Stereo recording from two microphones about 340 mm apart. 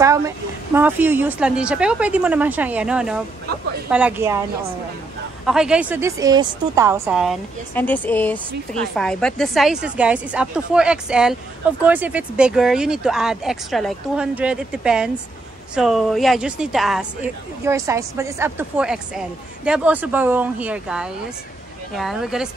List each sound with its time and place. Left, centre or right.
0.0 s speech: centre
5.4 s speech: centre